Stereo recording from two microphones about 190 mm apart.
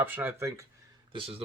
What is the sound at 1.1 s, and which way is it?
Speech, 30° right (ahead or behind).